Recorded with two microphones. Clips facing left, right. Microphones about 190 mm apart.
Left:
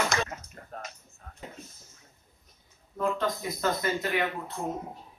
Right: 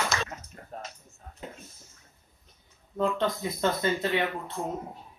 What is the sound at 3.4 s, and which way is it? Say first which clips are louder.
Speech: right 2 dB; 25° right (ahead or behind).